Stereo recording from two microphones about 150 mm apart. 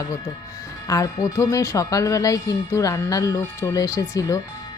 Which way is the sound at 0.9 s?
20° left (ahead or behind).